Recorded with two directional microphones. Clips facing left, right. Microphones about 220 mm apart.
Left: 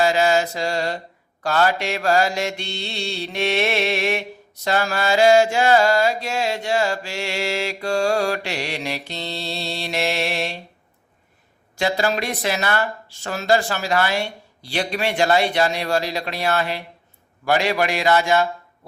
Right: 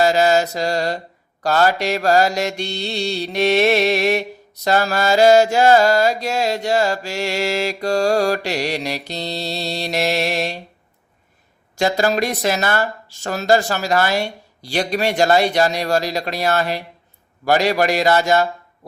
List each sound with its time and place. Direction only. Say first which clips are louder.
0.0 s mantra: right 3 dB; 40° right (ahead or behind)
11.8 s mantra: right 4 dB; 40° right (ahead or behind)